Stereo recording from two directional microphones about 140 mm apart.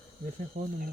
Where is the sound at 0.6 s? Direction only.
90° right.